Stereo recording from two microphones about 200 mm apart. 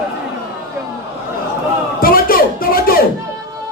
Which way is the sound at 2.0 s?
45° left (ahead or behind).